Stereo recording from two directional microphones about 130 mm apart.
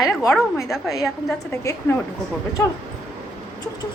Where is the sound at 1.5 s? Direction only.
20° left (ahead or behind).